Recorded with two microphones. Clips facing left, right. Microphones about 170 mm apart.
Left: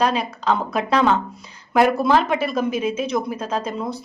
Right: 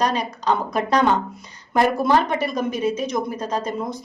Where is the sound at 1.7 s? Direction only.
5° left (ahead or behind).